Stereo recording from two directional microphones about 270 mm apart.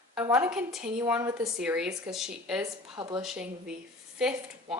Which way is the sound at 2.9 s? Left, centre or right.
Centre.